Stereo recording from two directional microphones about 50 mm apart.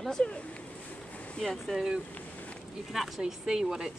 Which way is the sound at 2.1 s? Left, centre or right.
Left.